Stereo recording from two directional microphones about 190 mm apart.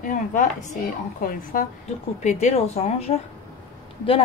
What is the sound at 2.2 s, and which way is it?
Speech, 35° left (ahead or behind).